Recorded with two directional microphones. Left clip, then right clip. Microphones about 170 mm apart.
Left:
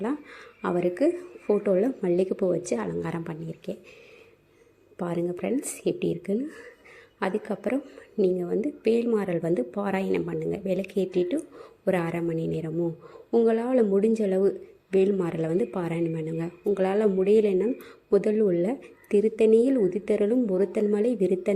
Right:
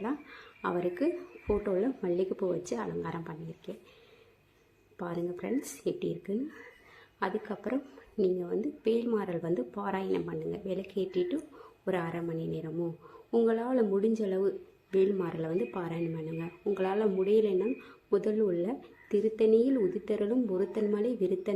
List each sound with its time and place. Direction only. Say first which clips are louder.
0.0 s a woman's voice: left 5 dB; 20° left (ahead or behind)
4.9 s a woman's voice: left 7 dB; 20° left (ahead or behind)